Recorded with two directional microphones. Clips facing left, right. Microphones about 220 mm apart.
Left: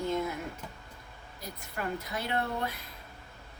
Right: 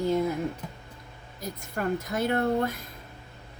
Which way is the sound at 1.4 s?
45° right (ahead or behind).